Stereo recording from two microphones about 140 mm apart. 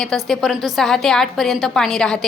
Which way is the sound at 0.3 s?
Centre (ahead or behind).